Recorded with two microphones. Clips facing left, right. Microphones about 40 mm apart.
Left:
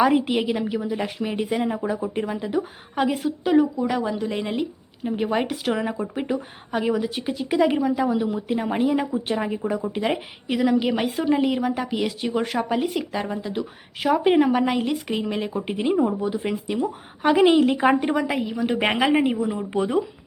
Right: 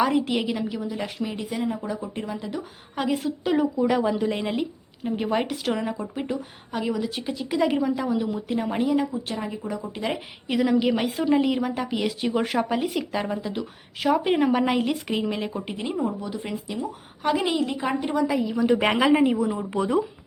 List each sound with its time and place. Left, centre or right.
0.0 s a woman's voice: centre
3.1 s a woman's voice: centre
9.0 s a woman's voice: left
10.5 s a woman's voice: centre
15.6 s a woman's voice: centre; by 18.5 s left
18.6 s a woman's voice: left
19.1 s a woman's voice: left